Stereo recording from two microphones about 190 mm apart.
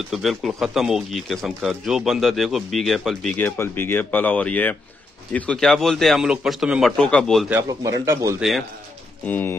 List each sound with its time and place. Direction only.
0.1 s speech: centre (ahead or behind)
7.8 s speech: 15° right (ahead or behind)
8.4 s speech: centre (ahead or behind)
9.2 s speech: 10° left (ahead or behind)